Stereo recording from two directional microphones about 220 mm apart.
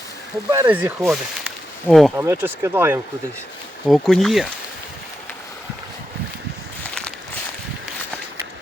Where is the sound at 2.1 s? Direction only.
10° right (ahead or behind).